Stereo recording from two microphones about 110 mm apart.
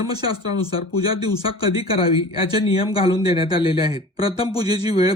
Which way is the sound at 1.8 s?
55° left (ahead or behind).